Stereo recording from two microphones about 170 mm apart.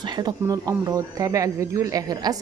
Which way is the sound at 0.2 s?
20° right (ahead or behind).